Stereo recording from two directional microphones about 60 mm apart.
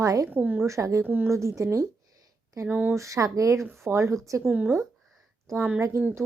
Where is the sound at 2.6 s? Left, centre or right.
Right.